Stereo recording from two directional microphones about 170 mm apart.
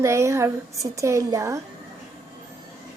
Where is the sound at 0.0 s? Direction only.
15° right (ahead or behind).